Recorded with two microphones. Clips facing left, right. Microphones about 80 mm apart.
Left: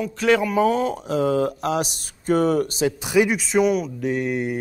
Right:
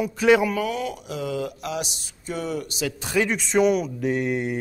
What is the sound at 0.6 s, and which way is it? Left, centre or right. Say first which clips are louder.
Speech: left 7 dB; left.